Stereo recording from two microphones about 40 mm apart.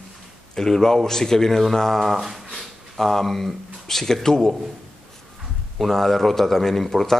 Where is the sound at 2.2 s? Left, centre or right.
Centre.